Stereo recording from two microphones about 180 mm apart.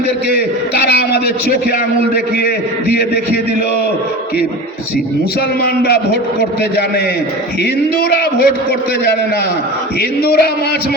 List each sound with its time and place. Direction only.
0.3 s a man's voice: 65° left (ahead or behind)
5.6 s a man's voice: 65° left (ahead or behind)
10.2 s a man's voice: 60° left (ahead or behind)